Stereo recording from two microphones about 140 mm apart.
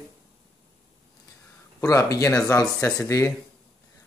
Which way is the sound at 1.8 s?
25° left (ahead or behind).